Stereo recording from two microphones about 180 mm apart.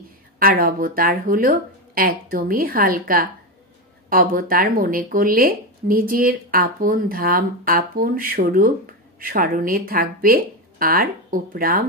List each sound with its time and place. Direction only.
0.4 s speech: 55° right (ahead or behind)